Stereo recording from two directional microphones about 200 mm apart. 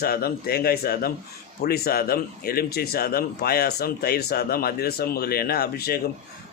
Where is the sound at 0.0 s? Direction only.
50° left (ahead or behind).